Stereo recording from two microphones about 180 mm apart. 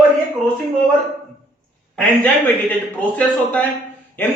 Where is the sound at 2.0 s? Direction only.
5° left (ahead or behind).